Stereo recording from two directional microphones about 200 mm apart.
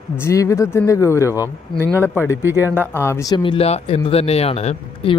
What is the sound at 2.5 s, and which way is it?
Speech, 10° right (ahead or behind).